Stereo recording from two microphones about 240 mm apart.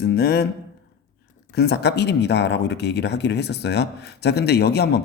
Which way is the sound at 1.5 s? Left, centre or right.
Left.